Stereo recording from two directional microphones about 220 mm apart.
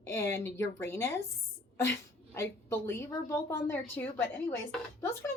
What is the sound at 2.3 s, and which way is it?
A woman's voice, 10° left (ahead or behind).